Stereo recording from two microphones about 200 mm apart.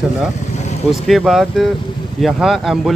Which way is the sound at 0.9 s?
Centre (ahead or behind).